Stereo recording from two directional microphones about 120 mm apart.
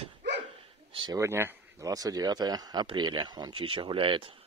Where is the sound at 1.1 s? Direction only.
20° right (ahead or behind); by 4.3 s 45° right (ahead or behind).